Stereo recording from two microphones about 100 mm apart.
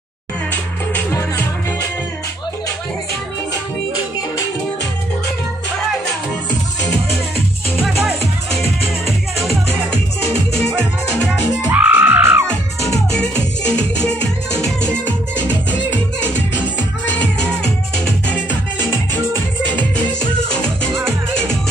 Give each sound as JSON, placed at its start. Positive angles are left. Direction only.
{"t": 1.1, "sound": "music", "side_deg": 35}
{"t": 9.0, "sound": "music", "side_deg": 0}
{"t": 11.2, "sound": "music", "side_deg": -15}
{"t": 13.7, "sound": "music", "side_deg": 10}
{"t": 17.2, "sound": "music", "side_deg": 10}
{"t": 20.9, "sound": "music", "side_deg": -25}